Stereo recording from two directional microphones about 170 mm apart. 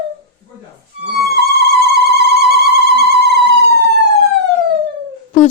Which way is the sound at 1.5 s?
75° right (ahead or behind).